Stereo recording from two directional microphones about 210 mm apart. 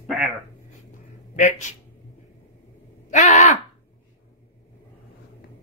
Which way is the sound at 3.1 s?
35° left (ahead or behind).